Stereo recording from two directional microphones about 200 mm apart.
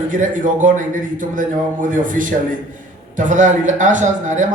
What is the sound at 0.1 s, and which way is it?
Speech, 40° right (ahead or behind).